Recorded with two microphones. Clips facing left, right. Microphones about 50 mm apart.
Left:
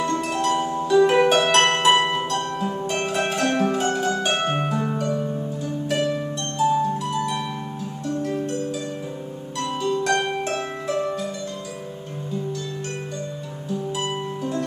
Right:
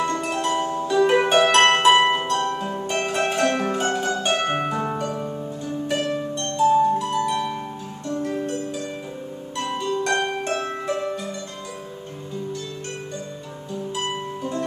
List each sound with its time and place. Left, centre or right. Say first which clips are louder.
0.0 s harp: left 1 dB; centre
2.2 s music: right 1 dB; centre
3.9 s harp: even; centre
6.7 s harp: right 4 dB; centre
8.1 s music: even; centre
9.6 s harp: even; centre
10.0 s harp: even; centre
10.9 s music: left 3 dB; centre
13.9 s music: left 1 dB; centre